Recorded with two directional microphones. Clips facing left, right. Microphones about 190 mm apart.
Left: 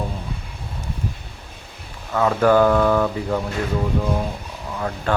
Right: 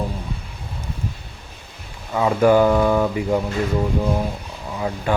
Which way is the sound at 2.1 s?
15° right (ahead or behind).